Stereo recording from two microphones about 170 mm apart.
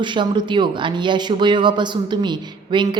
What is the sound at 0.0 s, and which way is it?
Speech, 25° right (ahead or behind).